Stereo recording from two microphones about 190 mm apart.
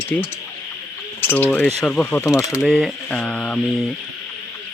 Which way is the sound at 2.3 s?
15° left (ahead or behind).